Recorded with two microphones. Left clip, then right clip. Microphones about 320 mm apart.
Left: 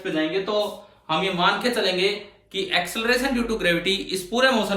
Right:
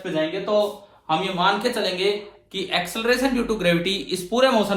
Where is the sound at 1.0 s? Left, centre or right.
Centre.